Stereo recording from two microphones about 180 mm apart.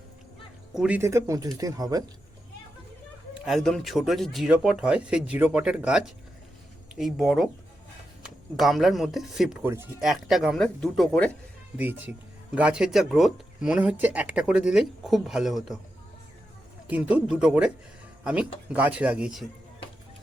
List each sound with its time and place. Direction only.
0.7 s speech: 5° right (ahead or behind); by 2.0 s 20° right (ahead or behind)
3.3 s speech: centre (ahead or behind)
7.0 s speech: centre (ahead or behind)
11.8 s speech: 10° right (ahead or behind)
16.8 s speech: 5° right (ahead or behind)
18.2 s music: 5° right (ahead or behind)
18.7 s speech: 10° right (ahead or behind)